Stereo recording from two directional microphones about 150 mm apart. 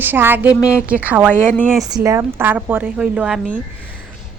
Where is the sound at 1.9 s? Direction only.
25° right (ahead or behind); by 3.4 s 5° right (ahead or behind).